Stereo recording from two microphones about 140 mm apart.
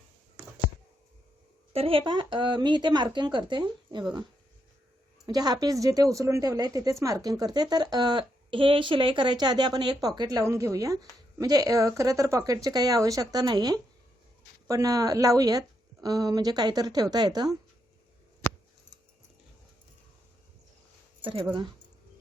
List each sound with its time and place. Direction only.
1.7 s speech: 40° right (ahead or behind)
5.2 s a woman's voice: 30° right (ahead or behind)